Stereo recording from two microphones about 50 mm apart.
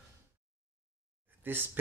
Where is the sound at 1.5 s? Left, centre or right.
Right.